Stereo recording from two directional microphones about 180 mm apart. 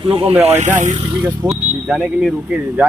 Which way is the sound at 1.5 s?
5° right (ahead or behind).